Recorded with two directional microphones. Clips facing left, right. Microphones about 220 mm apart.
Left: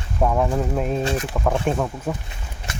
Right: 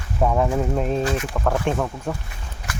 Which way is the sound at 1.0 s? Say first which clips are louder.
Even; 30° left (ahead or behind).